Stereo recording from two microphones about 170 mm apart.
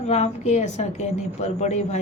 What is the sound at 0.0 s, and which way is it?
A woman's voice, 40° left (ahead or behind).